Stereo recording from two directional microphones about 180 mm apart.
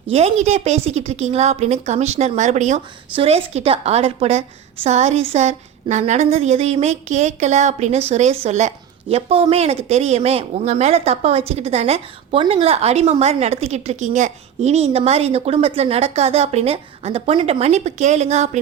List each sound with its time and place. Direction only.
0.1 s a woman's voice: 35° right (ahead or behind)